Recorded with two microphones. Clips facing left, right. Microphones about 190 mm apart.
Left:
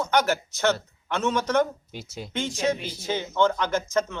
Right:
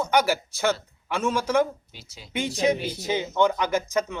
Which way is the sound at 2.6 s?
15° right (ahead or behind).